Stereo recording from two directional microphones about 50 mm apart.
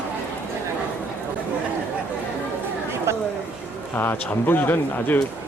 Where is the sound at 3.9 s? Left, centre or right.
Left.